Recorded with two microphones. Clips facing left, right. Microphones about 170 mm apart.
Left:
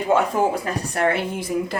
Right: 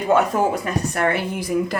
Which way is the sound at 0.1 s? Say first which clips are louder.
Right 1 dB; 30° left (ahead or behind).